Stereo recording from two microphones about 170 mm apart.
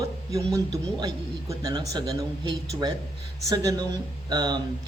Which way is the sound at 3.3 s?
20° right (ahead or behind).